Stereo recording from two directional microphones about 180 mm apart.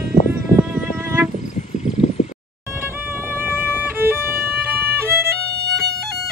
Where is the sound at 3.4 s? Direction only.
10° right (ahead or behind).